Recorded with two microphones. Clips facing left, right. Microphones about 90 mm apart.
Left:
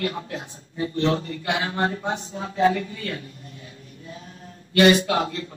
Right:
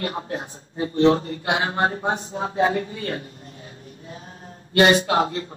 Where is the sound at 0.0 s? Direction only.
35° right (ahead or behind).